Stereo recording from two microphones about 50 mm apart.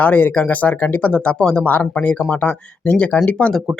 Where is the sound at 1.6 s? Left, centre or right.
Left.